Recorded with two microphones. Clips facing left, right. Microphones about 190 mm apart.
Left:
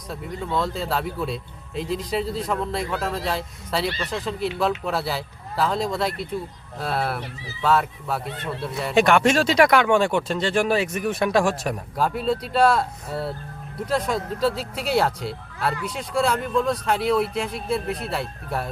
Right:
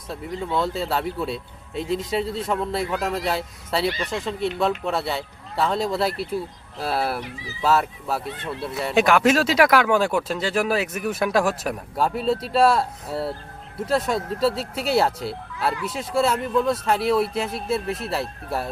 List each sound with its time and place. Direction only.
0.1 s speech: centre (ahead or behind)
3.9 s speech: 15° right (ahead or behind)
4.2 s speech: centre (ahead or behind)